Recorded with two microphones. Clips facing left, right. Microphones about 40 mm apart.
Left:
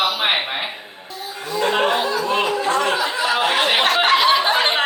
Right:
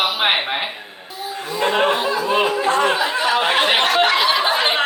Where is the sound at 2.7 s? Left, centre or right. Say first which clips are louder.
Right 2 dB; right.